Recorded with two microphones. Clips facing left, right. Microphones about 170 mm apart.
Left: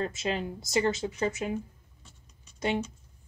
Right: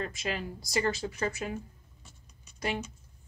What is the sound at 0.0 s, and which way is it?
Speech, 25° left (ahead or behind).